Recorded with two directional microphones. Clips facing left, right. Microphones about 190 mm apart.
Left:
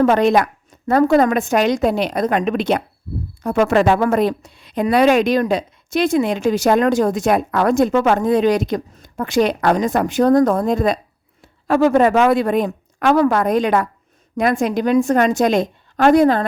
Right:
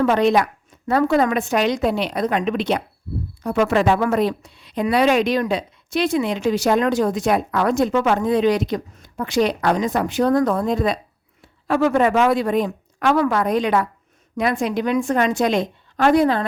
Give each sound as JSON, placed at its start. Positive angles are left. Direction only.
{"t": 0.0, "sound": "speech", "side_deg": 45}
{"t": 12.2, "sound": "speech", "side_deg": 55}